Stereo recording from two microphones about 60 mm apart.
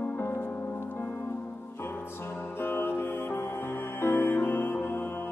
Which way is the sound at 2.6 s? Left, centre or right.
Left.